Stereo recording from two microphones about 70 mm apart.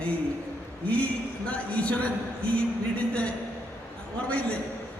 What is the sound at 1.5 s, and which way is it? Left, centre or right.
Speech, centre.